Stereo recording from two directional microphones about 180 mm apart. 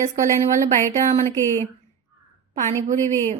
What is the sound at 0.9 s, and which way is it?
Speech, 40° right (ahead or behind).